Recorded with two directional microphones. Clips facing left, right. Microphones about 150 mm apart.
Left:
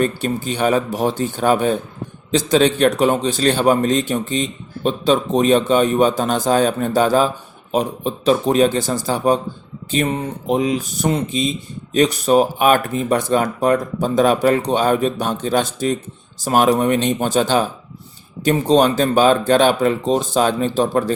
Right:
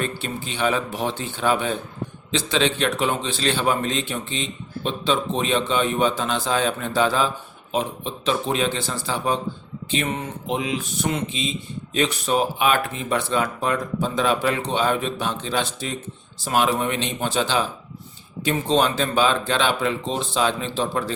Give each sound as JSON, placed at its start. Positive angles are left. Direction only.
{"t": 0.2, "sound": "a man's voice", "side_deg": 40}